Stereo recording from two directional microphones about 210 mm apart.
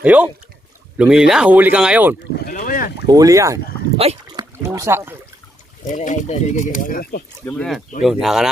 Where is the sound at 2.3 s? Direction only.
50° left (ahead or behind).